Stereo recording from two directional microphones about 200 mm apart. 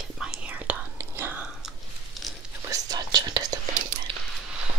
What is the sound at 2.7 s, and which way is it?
Whispering, 20° right (ahead or behind).